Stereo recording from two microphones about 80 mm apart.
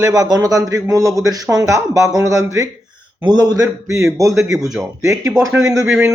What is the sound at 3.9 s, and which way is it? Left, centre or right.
A man's voice, right.